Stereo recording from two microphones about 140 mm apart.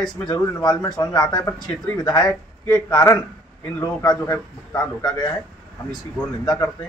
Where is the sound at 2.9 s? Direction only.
25° left (ahead or behind).